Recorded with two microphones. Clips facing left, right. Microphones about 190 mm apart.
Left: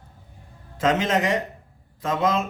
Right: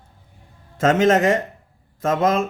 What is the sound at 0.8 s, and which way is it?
Speech, 50° right (ahead or behind).